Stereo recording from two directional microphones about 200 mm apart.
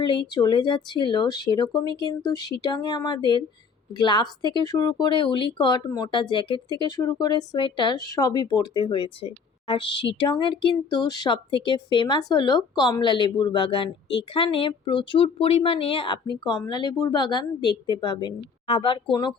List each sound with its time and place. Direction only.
0.3 s speech: 20° left (ahead or behind)